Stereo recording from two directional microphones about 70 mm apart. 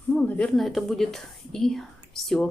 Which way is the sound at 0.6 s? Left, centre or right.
Centre.